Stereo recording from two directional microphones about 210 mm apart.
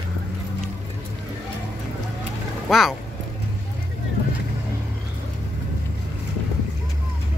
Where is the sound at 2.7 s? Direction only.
Centre (ahead or behind).